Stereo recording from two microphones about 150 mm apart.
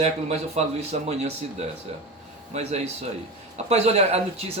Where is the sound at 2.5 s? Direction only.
45° right (ahead or behind).